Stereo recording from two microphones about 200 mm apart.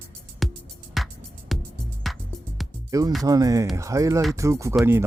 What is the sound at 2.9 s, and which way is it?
Speech, 15° right (ahead or behind).